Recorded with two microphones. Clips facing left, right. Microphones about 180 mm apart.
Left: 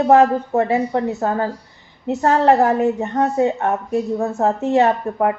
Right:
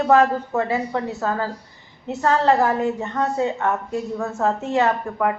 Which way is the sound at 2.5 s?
35° left (ahead or behind).